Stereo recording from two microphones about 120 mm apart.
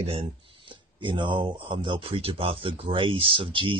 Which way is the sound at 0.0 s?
50° right (ahead or behind).